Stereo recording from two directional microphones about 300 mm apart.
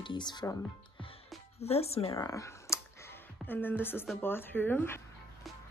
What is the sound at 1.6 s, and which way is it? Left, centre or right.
A woman's voice, centre.